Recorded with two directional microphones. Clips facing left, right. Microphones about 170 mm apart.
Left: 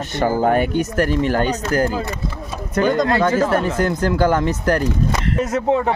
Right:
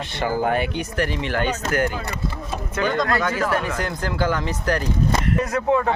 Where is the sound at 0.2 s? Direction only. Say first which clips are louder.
Left 5 dB; 45° left (ahead or behind).